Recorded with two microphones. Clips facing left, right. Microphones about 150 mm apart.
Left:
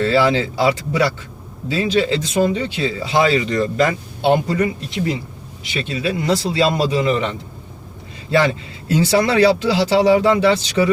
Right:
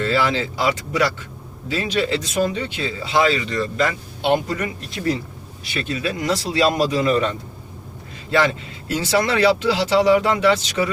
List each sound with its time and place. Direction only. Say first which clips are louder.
0.0 s a man's voice: left 4 dB; 30° left (ahead or behind)
8.3 s speech: left 2 dB; 30° left (ahead or behind)